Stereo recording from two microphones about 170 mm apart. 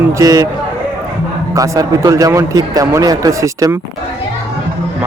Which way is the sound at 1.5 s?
20° right (ahead or behind).